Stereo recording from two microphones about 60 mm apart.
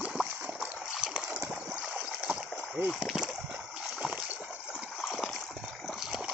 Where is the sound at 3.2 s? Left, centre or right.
Centre.